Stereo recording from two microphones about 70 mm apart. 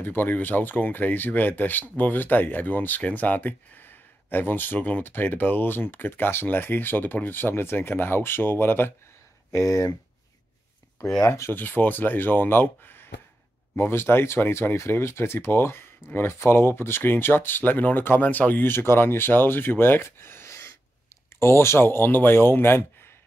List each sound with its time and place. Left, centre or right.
0.0 s speech: left
9.5 s speech: left
11.0 s speech: centre
11.2 s speech: left
11.5 s speech: left